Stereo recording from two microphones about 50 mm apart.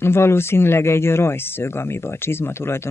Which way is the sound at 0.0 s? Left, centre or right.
Left.